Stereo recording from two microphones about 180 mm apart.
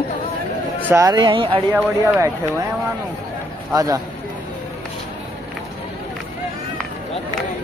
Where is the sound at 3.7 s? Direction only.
20° right (ahead or behind).